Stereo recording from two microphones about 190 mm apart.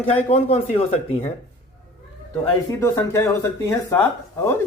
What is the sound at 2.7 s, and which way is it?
Speech, 15° left (ahead or behind).